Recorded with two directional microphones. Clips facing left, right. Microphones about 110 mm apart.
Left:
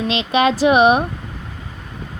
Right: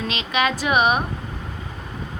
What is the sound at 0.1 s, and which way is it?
Speech, 35° left (ahead or behind).